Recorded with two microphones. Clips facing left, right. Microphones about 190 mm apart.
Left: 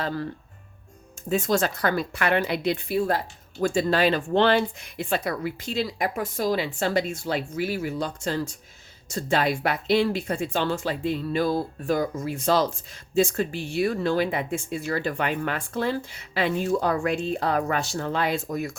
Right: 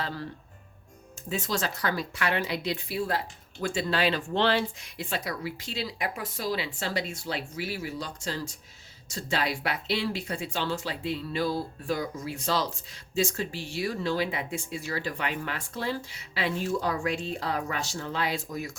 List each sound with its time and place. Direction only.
1.3 s speech: 50° left (ahead or behind)